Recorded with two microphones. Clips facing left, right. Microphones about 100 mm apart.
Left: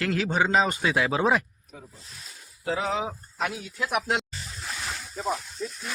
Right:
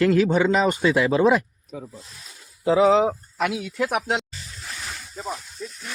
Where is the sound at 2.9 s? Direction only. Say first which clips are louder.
Right 11 dB; 80° right.